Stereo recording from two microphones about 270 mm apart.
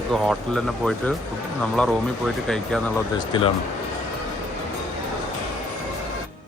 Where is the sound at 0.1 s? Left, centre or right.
Centre.